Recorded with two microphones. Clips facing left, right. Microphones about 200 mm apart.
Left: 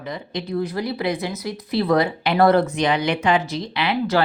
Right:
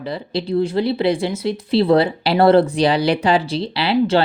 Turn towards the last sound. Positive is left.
turn(degrees=-30)  # may be behind; listen again after turning